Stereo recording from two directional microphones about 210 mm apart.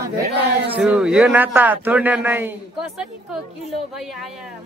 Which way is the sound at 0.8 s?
5° right (ahead or behind).